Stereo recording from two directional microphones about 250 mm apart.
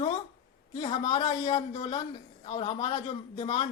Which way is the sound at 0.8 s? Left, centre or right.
Left.